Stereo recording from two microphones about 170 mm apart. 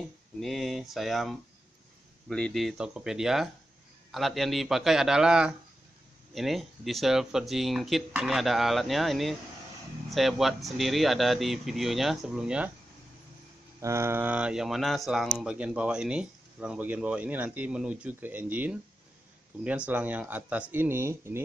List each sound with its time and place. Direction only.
0.4 s speech: centre (ahead or behind)
13.7 s speech: 15° right (ahead or behind)
19.9 s speech: 10° right (ahead or behind)